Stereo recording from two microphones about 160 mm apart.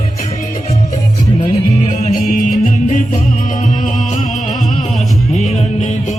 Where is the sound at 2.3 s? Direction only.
55° left (ahead or behind).